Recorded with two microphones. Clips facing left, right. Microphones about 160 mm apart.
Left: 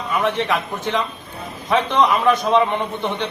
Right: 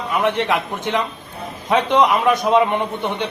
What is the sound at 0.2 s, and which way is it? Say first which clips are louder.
A man's voice: right 2 dB; 15° right (ahead or behind).